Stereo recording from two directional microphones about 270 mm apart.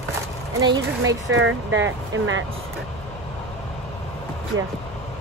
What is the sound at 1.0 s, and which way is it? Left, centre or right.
Speech, right.